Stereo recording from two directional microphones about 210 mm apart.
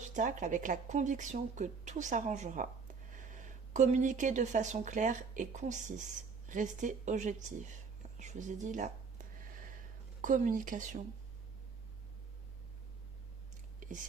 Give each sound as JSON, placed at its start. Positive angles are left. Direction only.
{"t": 0.1, "sound": "speech", "side_deg": -35}
{"t": 9.4, "sound": "a sound", "side_deg": -40}
{"t": 10.2, "sound": "speech", "side_deg": -40}